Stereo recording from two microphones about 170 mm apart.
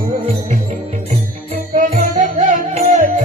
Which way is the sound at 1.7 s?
50° right (ahead or behind).